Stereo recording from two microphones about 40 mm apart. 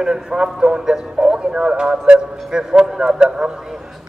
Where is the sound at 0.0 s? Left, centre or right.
Centre.